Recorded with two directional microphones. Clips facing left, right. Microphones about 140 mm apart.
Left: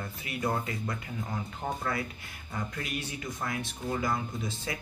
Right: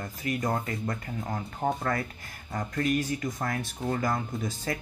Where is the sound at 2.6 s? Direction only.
45° right (ahead or behind).